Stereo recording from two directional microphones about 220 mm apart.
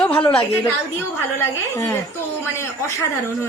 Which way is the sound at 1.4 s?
15° left (ahead or behind).